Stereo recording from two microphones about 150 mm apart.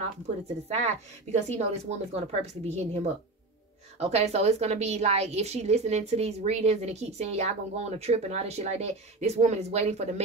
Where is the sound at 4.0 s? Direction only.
45° right (ahead or behind).